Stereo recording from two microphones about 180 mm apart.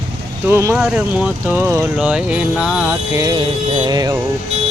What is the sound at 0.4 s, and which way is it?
Music, 15° right (ahead or behind).